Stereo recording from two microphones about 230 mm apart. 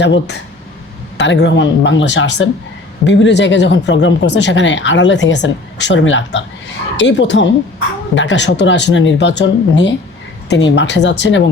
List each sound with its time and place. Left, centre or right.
0.0 s speech: left